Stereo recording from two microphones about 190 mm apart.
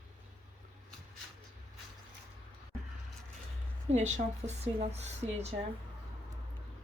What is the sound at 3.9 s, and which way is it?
A woman's voice, 35° right (ahead or behind).